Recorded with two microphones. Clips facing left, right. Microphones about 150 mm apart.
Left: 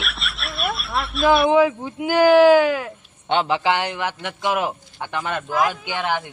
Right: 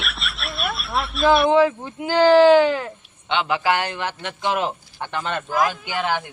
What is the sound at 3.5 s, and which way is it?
Speech, 20° left (ahead or behind).